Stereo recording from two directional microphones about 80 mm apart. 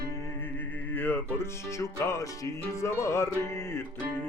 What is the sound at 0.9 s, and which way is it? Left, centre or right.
Music, left.